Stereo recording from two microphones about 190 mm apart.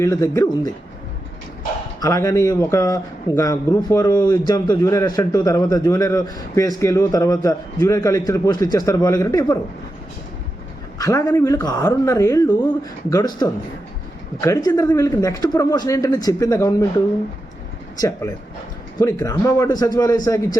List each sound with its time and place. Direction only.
0.0 s a man's voice: 15° left (ahead or behind)
2.0 s a man's voice: 15° left (ahead or behind)
10.9 s a man's voice: 15° left (ahead or behind)
18.9 s speech: 15° left (ahead or behind)